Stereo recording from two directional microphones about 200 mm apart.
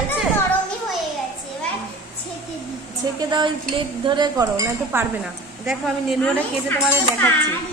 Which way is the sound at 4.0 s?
20° right (ahead or behind).